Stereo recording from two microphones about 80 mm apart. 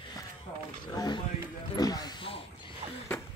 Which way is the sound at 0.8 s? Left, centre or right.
Left.